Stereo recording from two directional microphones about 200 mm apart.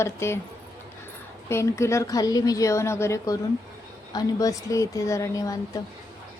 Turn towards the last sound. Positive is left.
turn(degrees=15)  # may be behind; listen again after turning